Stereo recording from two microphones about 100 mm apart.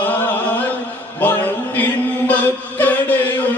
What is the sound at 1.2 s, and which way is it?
Chant, 15° left (ahead or behind).